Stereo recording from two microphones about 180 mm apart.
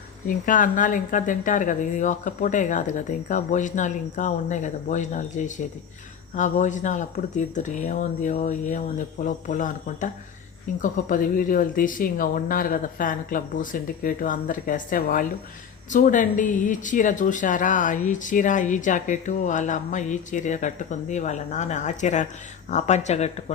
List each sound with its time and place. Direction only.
0.3 s speech: 45° left (ahead or behind)